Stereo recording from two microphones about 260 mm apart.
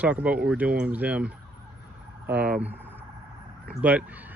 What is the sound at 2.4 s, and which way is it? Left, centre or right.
Speech, right.